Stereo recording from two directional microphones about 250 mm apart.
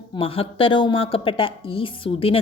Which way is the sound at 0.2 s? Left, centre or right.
Left.